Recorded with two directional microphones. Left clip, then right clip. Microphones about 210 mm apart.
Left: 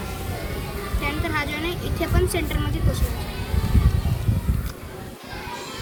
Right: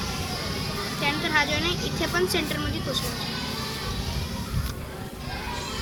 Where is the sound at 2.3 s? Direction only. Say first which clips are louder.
Even; 20° left (ahead or behind).